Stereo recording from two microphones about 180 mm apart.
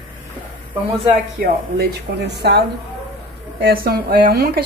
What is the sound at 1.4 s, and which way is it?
Speech, 65° right (ahead or behind).